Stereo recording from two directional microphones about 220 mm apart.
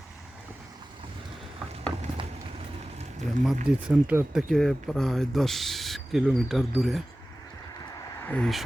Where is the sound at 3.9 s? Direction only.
5° right (ahead or behind).